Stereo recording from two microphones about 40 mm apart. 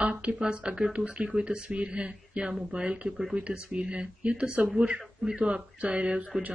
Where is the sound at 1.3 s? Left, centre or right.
Right.